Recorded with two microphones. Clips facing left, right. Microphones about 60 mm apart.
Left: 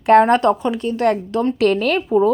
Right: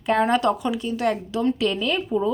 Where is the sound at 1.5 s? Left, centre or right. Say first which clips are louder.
Left 7 dB; left.